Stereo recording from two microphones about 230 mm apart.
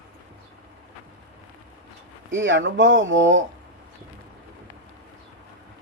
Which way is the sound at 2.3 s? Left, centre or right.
Right.